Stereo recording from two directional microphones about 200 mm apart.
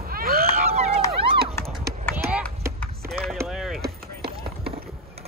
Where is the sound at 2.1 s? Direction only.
10° right (ahead or behind).